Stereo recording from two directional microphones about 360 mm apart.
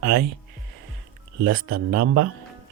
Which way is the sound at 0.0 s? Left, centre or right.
Right.